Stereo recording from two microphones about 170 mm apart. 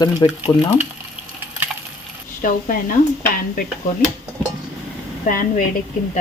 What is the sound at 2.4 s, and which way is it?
Speech, 55° left (ahead or behind).